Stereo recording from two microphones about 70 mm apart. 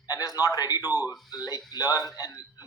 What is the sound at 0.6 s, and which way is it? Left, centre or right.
Speech, left.